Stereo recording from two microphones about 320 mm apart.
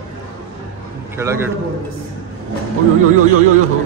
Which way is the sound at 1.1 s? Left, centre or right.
Centre.